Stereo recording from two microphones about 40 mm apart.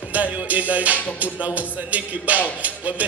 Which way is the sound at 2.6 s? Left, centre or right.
Right.